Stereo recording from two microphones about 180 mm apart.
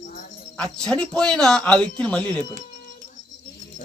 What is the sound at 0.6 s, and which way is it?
Speech, 5° left (ahead or behind).